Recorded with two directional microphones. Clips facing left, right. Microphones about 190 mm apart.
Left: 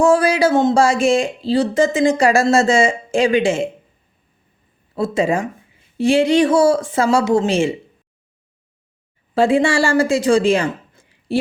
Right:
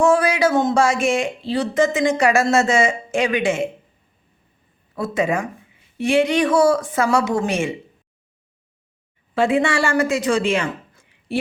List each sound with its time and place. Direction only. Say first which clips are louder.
0.0 s speech: left 2 dB; 30° left (ahead or behind)
4.9 s speech: left 3 dB; 30° left (ahead or behind)
9.3 s speech: left 3 dB; 30° left (ahead or behind)